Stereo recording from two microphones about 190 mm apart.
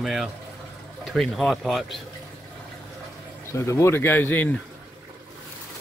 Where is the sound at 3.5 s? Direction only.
15° left (ahead or behind).